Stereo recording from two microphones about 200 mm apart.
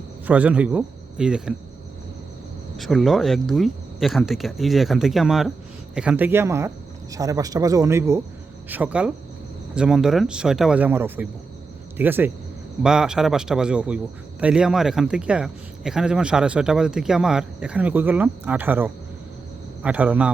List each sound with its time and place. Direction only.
0.3 s speech: 5° right (ahead or behind)
2.7 s a man's voice: centre (ahead or behind)